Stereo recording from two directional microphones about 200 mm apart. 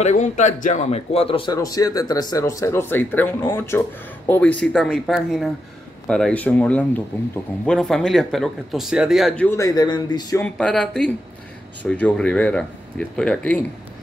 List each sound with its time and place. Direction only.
0.0 s a man's voice: 35° left (ahead or behind); by 9.5 s centre (ahead or behind)
9.5 s a man's voice: 15° left (ahead or behind)
10.4 s speech: 5° left (ahead or behind)